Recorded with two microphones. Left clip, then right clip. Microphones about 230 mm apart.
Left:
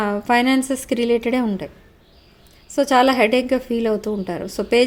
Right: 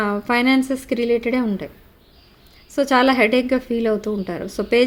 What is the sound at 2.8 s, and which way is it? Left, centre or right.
A woman's voice, centre.